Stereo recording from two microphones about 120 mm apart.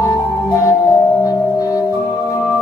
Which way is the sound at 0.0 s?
25° left (ahead or behind).